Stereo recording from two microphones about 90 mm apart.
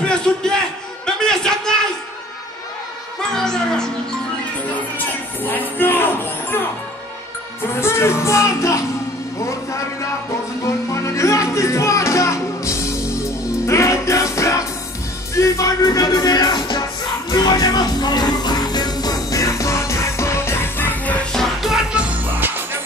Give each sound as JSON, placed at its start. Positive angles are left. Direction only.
{"t": 0.0, "sound": "a sound", "side_deg": 10}
{"t": 3.2, "sound": "music", "side_deg": 5}
{"t": 4.7, "sound": "a sound", "side_deg": 20}
{"t": 7.8, "sound": "music", "side_deg": 30}
{"t": 9.4, "sound": "a man's voice", "side_deg": 35}
{"t": 10.6, "sound": "music", "side_deg": 35}
{"t": 21.9, "sound": "music", "side_deg": -15}